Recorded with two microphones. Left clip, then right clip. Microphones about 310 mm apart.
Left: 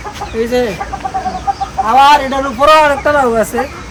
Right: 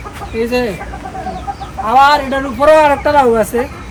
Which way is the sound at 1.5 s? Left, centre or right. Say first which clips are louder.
Left 11 dB; left.